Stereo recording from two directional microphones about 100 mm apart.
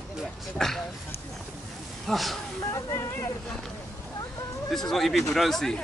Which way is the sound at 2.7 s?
30° left (ahead or behind).